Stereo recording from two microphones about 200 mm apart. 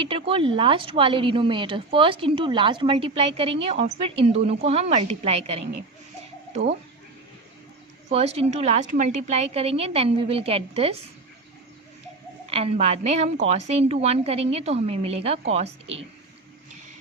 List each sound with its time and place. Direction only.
0.0 s a woman's voice: 25° right (ahead or behind)
8.1 s a woman's voice: 30° right (ahead or behind)
12.5 s a woman's voice: 30° right (ahead or behind)